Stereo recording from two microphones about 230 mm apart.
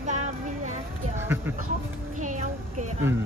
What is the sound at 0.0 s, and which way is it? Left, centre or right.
Music, right.